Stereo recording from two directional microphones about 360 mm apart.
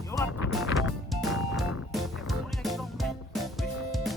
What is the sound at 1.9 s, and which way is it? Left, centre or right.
Music, centre.